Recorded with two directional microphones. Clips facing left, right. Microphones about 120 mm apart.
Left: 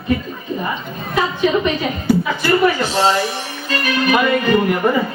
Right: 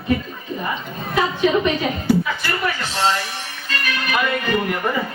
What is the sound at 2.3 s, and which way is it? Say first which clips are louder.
Speech: left 8 dB; 25° left (ahead or behind).